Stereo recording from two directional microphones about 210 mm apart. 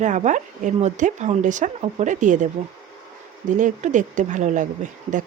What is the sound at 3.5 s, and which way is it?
Speech, 35° right (ahead or behind).